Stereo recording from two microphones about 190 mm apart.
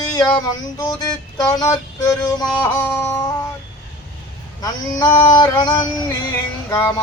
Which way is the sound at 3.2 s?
20° left (ahead or behind).